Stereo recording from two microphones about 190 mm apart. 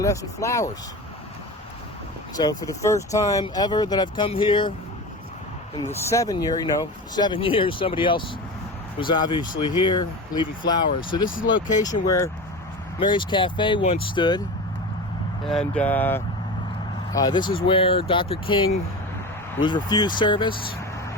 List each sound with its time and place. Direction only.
0.0 s speech: 15° left (ahead or behind)
2.3 s speech: 20° left (ahead or behind)
5.7 s speech: 15° left (ahead or behind)
10.6 s speech: 25° left (ahead or behind)
15.4 s speech: 5° left (ahead or behind); by 20.6 s 25° left (ahead or behind)